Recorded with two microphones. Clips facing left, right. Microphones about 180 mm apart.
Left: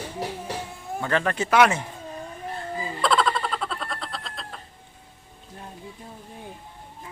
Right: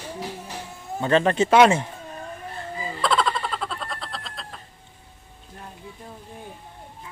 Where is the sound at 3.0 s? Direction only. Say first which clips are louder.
Left 1 dB; centre (ahead or behind).